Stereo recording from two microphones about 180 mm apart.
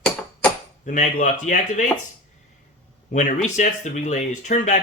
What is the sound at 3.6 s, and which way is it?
Speech, 45° left (ahead or behind).